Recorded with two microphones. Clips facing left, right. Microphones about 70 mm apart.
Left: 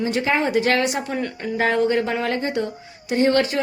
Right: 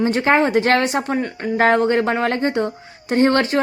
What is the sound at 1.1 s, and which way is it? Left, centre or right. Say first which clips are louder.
Speech: right 3 dB; right.